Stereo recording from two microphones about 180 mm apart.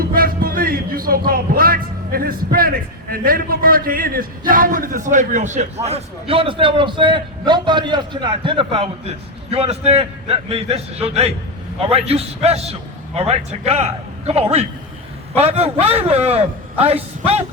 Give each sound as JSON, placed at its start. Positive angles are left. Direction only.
{"t": 0.0, "sound": "speech", "side_deg": -55}